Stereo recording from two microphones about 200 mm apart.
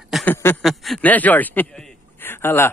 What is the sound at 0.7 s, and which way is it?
A man's voice, centre (ahead or behind).